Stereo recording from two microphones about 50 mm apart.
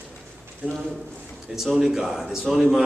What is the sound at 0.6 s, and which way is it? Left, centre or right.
Speech, right.